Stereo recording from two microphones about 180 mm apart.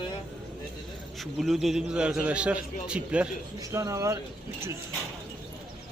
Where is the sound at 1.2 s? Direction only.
Centre (ahead or behind).